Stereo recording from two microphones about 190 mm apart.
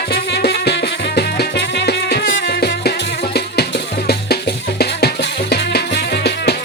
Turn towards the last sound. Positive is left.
turn(degrees=60)  # may be behind; listen again after turning